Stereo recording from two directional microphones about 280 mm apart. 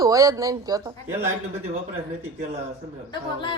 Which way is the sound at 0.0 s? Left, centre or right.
Centre.